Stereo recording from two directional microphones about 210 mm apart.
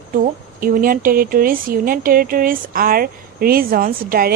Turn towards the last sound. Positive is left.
turn(degrees=-45)  # may be behind; listen again after turning